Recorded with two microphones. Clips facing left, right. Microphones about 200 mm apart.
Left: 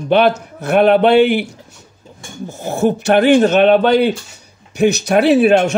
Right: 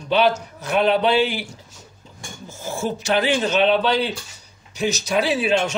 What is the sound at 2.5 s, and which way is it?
A man's voice, 65° left (ahead or behind).